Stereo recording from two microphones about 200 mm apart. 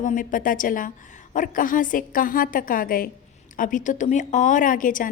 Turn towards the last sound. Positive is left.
turn(degrees=40)  # may be behind; listen again after turning